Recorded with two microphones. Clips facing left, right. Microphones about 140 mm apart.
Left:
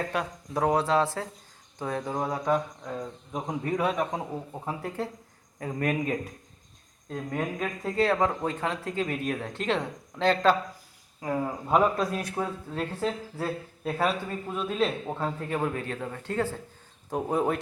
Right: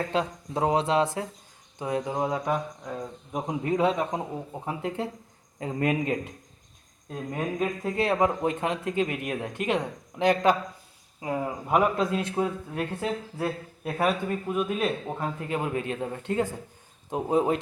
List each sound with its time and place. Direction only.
0.1 s speech: 25° right (ahead or behind)